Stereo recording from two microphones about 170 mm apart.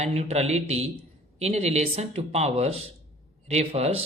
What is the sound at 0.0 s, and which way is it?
Speech, 40° right (ahead or behind).